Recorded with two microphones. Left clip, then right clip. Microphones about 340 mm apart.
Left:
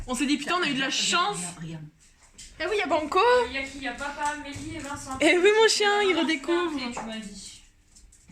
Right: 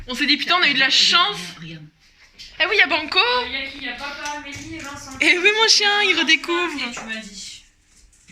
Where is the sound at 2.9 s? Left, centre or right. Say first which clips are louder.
Right 2 dB; left.